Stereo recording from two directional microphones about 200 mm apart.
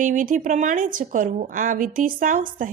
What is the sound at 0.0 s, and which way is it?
A woman's voice, 40° right (ahead or behind).